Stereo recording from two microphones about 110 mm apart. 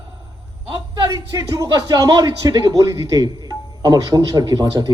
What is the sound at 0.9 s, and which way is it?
A man's voice, 35° right (ahead or behind).